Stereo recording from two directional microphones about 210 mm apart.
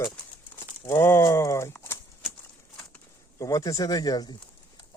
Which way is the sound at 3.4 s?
15° left (ahead or behind).